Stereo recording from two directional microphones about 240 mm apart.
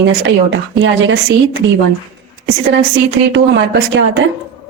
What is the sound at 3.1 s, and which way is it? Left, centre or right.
Speech, right.